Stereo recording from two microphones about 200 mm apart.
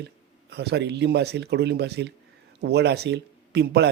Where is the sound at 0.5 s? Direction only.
55° right (ahead or behind).